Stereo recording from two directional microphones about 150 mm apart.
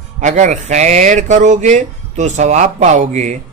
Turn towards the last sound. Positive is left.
turn(degrees=-55)  # may be behind; listen again after turning